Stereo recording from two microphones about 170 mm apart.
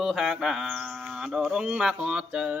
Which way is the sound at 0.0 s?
Centre (ahead or behind).